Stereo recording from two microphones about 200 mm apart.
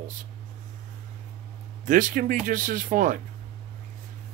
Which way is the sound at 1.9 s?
45° right (ahead or behind).